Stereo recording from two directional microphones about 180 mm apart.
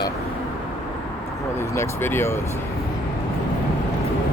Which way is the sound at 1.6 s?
15° left (ahead or behind).